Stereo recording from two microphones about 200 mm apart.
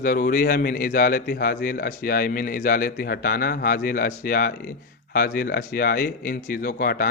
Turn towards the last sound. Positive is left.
turn(degrees=45)  # may be behind; listen again after turning